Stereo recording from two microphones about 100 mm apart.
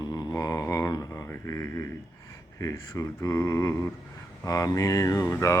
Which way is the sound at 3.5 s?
30° left (ahead or behind).